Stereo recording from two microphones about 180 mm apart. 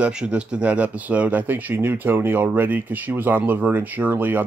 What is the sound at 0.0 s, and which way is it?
Speech, 5° right (ahead or behind).